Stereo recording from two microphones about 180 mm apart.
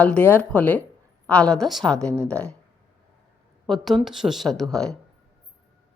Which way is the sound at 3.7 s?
Centre (ahead or behind).